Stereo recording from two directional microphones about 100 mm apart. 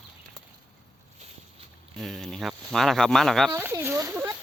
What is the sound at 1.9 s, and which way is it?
Speech, centre (ahead or behind).